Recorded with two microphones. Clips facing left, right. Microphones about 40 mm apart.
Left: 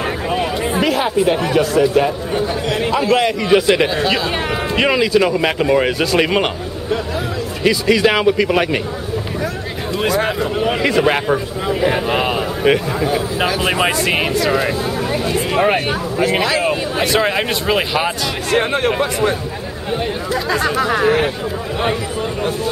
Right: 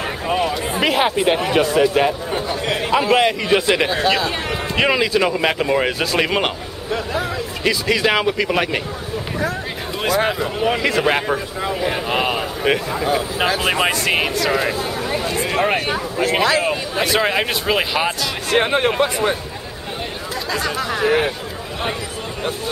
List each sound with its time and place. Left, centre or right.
0.8 s a man's voice: right
3.4 s speech: centre
10.0 s a man's voice: centre
20.5 s speech: centre